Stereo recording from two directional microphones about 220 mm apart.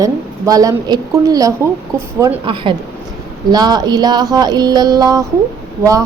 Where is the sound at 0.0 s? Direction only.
15° right (ahead or behind).